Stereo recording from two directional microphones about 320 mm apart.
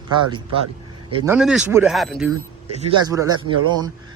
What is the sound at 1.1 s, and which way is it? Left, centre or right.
Speech, centre.